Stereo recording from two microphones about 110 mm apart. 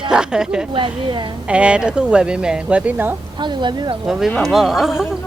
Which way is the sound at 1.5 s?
10° right (ahead or behind).